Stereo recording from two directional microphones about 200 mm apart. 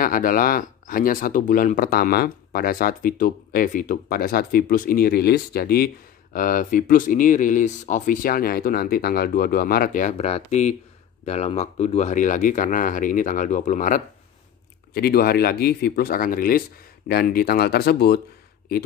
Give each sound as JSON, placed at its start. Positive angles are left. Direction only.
{"t": 0.0, "sound": "speech", "side_deg": 45}
{"t": 15.0, "sound": "speech", "side_deg": 50}